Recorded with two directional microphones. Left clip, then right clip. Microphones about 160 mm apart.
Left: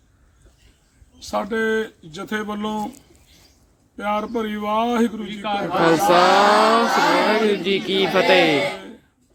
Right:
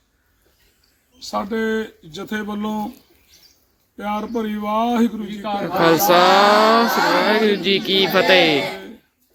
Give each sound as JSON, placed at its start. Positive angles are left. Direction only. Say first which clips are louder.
{"t": 1.3, "sound": "speech", "louder": "left 1 dB", "side_deg": -5}
{"t": 3.9, "sound": "speech", "louder": "left 1 dB", "side_deg": -5}
{"t": 5.3, "sound": "a man's voice", "louder": "even", "side_deg": -20}
{"t": 5.6, "sound": "speech", "louder": "right 2 dB", "side_deg": 0}
{"t": 8.6, "sound": "a sound", "louder": "left 2 dB", "side_deg": -10}